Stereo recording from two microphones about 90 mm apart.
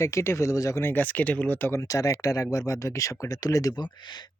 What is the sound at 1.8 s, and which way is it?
Speech, 40° left (ahead or behind).